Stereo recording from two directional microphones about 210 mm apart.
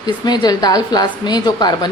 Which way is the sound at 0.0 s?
20° left (ahead or behind).